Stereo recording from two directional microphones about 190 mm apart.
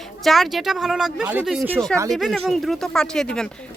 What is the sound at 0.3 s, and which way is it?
Speech, centre (ahead or behind).